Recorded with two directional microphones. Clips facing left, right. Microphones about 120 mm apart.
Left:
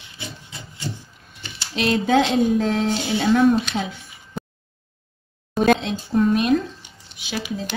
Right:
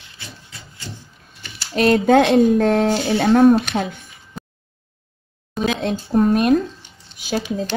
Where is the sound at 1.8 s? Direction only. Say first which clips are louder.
Right 5 dB; 50° right (ahead or behind).